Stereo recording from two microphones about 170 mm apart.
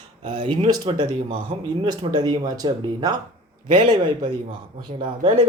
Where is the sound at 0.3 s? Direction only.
30° right (ahead or behind).